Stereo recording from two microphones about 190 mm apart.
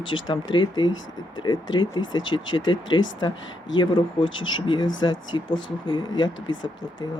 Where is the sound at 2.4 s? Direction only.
90° left.